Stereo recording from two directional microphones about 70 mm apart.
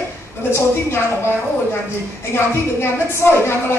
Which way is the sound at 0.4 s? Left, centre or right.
Left.